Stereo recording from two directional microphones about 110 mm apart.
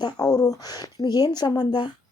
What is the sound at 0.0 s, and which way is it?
Speech, 35° left (ahead or behind).